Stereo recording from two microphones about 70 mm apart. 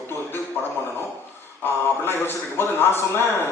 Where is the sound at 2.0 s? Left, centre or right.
Left.